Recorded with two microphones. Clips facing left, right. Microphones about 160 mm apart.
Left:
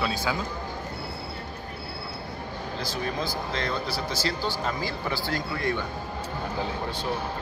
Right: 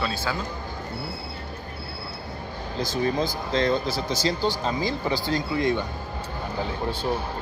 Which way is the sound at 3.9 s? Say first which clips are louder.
Right 4 dB; 20° right (ahead or behind).